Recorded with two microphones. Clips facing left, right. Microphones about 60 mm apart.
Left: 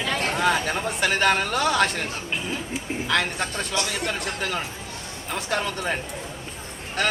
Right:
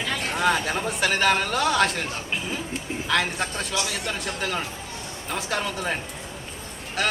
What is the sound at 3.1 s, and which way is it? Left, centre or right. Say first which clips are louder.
Music: even; centre.